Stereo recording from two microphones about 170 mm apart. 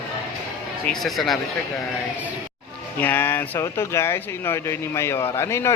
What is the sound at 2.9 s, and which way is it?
Speech, 10° left (ahead or behind).